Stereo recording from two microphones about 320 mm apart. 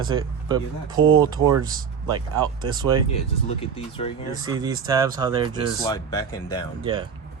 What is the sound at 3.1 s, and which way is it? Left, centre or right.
Speech, centre.